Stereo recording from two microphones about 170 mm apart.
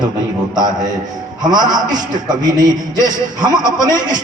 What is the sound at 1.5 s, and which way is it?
A man's voice, 25° right (ahead or behind).